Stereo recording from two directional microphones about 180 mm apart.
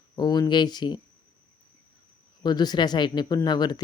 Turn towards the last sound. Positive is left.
turn(degrees=20)  # may be behind; listen again after turning